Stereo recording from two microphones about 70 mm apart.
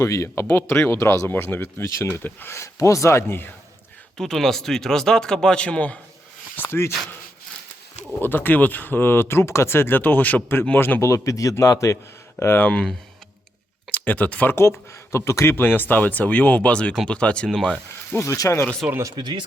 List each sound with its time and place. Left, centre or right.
0.0 s speech: left
1.3 s speech: left
2.7 s speech: left
4.2 s speech: centre
6.6 s speech: left
8.2 s speech: left
11.0 s speech: left
12.4 s speech: left
12.6 s speech: centre
13.9 s speech: left
14.5 s speech: left; by 17.5 s centre
18.1 s speech: left
18.8 s speech: centre